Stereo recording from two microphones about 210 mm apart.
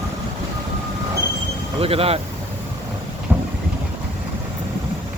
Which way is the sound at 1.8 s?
25° right (ahead or behind).